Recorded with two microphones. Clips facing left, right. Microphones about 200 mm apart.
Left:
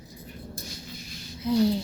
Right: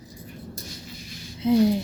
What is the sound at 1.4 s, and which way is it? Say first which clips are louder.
Speech: right 4 dB; 20° right (ahead or behind).